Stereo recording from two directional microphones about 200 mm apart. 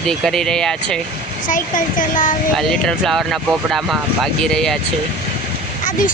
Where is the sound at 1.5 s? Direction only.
40° left (ahead or behind).